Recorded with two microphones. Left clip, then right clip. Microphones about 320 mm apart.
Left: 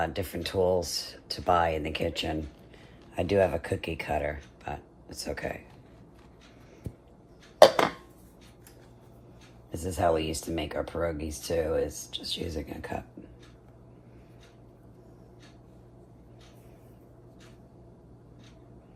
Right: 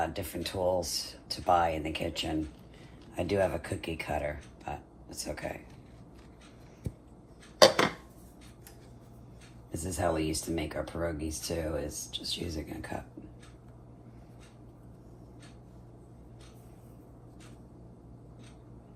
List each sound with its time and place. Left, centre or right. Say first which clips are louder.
0.0 s speech: left 2 dB; left
9.7 s speech: left 5 dB; left